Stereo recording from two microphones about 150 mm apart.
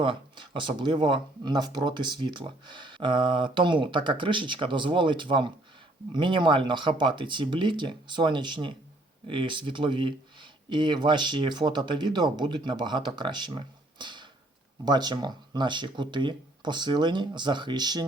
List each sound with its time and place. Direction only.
0.0 s speech: 35° right (ahead or behind)